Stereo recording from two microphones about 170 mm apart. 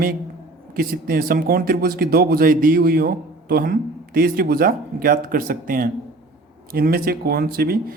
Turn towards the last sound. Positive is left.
turn(degrees=-60)  # may be behind; listen again after turning